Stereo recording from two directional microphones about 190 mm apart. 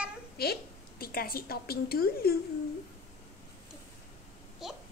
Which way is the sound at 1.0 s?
50° left (ahead or behind).